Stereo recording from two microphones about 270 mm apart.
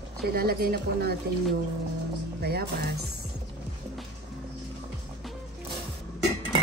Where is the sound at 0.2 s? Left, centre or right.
Right.